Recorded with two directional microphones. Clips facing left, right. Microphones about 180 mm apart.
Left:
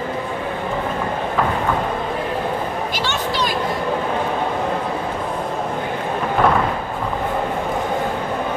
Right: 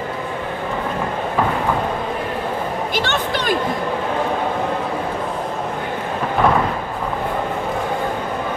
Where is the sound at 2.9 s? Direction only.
50° right (ahead or behind).